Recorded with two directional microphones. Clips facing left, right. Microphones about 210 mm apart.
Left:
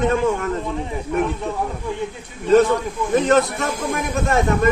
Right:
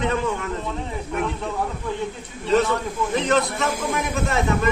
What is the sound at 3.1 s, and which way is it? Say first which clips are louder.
A man's voice: left 6 dB; 45° left (ahead or behind).